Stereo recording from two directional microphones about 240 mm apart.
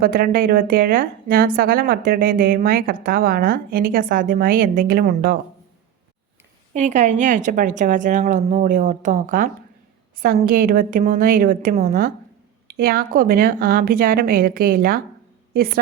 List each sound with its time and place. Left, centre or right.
0.0 s a woman's voice: right
6.7 s a woman's voice: right